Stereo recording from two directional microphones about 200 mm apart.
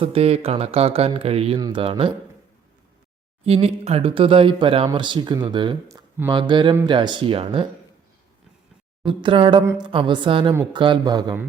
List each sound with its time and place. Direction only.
0.0 s speech: 30° right (ahead or behind)
3.4 s speech: 30° right (ahead or behind)
9.0 s speech: 25° right (ahead or behind)
10.5 s speech: 15° right (ahead or behind)